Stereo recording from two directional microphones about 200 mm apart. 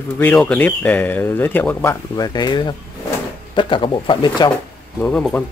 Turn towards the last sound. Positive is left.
turn(degrees=5)  # may be behind; listen again after turning